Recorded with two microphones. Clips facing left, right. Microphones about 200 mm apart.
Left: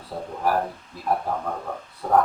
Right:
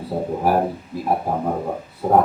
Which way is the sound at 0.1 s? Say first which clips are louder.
Right 5 dB; 30° right (ahead or behind).